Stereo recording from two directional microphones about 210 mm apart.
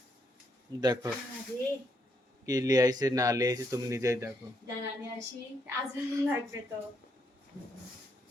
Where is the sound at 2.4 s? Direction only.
15° right (ahead or behind).